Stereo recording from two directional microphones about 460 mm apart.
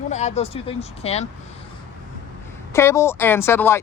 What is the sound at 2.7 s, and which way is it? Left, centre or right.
Speech, centre.